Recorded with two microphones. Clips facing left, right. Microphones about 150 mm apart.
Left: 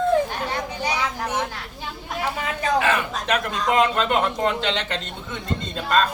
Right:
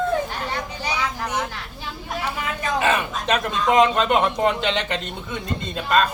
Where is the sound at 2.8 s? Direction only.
20° right (ahead or behind).